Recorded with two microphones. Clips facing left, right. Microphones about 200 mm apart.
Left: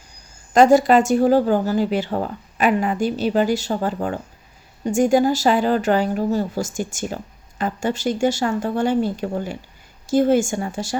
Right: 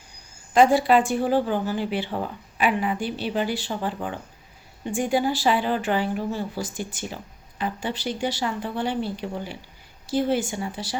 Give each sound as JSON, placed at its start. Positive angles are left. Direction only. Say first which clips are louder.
{"t": 0.5, "sound": "speech", "louder": "left 4 dB", "side_deg": 45}